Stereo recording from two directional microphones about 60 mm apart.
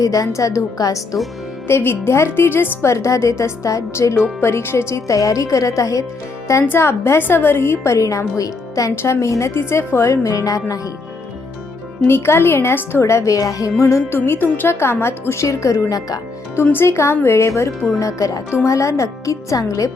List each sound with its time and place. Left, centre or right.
0.0 s a woman's voice: left
1.6 s a woman's voice: left
2.8 s a woman's voice: left
4.4 s a woman's voice: left
6.7 s a woman's voice: left
7.9 s a woman's voice: left
9.5 s a woman's voice: left
10.2 s a woman's voice: left
12.0 s a woman's voice: left
14.1 s a woman's voice: left
15.4 s a woman's voice: left
16.7 s a woman's voice: left
18.0 s a woman's voice: left